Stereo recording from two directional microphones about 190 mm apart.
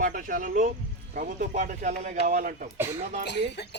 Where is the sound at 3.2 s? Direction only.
60° left (ahead or behind).